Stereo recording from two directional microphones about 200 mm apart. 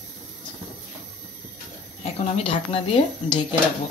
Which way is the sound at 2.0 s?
30° left (ahead or behind).